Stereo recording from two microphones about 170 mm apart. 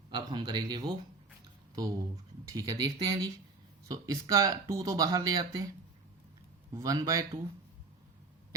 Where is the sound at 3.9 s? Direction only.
20° right (ahead or behind).